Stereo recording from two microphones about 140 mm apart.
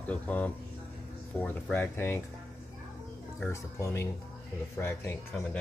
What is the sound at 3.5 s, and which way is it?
Speech, 20° left (ahead or behind).